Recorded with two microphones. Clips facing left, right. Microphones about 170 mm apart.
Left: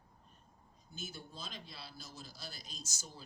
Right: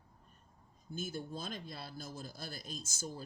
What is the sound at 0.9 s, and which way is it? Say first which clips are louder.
Speech: right 8 dB; 50° right (ahead or behind).